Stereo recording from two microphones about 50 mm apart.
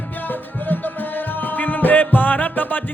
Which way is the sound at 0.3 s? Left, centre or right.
Left.